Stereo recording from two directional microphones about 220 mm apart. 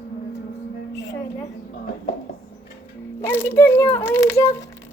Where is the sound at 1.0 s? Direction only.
15° left (ahead or behind).